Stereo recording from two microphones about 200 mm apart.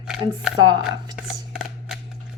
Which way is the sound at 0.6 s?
20° right (ahead or behind).